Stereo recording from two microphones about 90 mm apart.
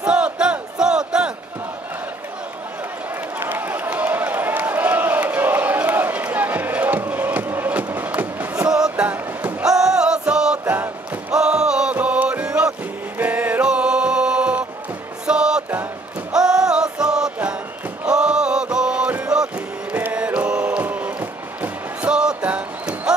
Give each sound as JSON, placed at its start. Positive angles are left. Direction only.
{"t": 0.0, "sound": "crowd", "side_deg": -10}
{"t": 3.3, "sound": "a sound", "side_deg": -20}
{"t": 8.6, "sound": "music", "side_deg": -10}
{"t": 10.6, "sound": "music", "side_deg": -20}
{"t": 11.3, "sound": "music", "side_deg": -10}